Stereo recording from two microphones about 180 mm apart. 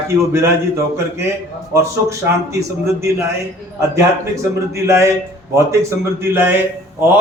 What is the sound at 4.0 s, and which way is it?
A man's voice, 15° right (ahead or behind).